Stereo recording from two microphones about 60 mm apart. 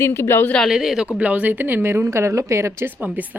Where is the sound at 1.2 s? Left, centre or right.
Right.